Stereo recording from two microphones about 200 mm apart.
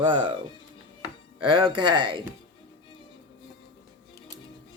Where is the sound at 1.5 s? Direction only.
25° right (ahead or behind).